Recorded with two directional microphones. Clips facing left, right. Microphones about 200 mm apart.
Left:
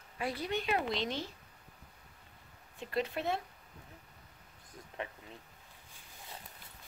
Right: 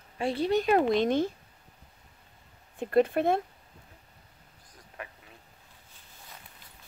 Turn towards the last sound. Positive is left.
turn(degrees=25)  # may be behind; listen again after turning